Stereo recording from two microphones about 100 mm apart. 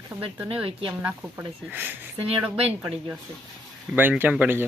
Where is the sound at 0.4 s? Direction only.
60° right (ahead or behind).